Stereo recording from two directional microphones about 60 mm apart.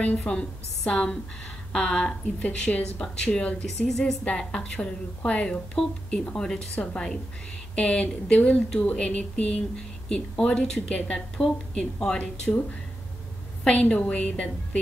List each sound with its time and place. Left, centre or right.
0.2 s a woman's voice: centre
3.6 s a woman's voice: centre
6.8 s a woman's voice: centre
13.7 s a woman's voice: left